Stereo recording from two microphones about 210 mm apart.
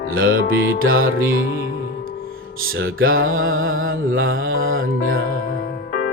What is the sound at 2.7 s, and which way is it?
Mantra, 70° right (ahead or behind).